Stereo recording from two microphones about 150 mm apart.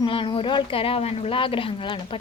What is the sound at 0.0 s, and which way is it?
A woman's voice, 35° left (ahead or behind).